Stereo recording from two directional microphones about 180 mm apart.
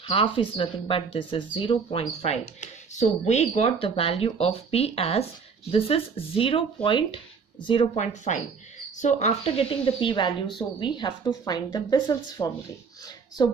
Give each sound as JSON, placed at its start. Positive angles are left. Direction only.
{"t": 0.0, "sound": "speech", "side_deg": 30}